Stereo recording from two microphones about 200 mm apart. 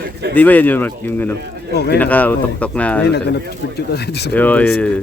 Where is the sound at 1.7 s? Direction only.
55° left (ahead or behind).